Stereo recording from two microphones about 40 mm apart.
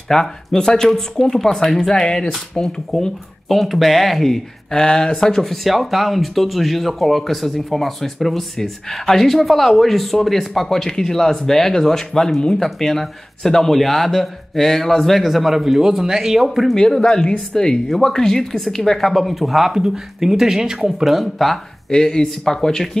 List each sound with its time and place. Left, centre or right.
0.1 s speech: centre
2.9 s speech: centre
12.5 s speech: centre
16.7 s speech: centre
21.8 s speech: centre